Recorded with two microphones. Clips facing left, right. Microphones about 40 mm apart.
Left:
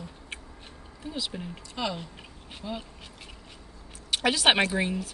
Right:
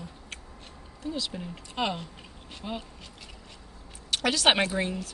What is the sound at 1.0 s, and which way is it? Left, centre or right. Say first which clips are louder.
Speech: right 1 dB; centre.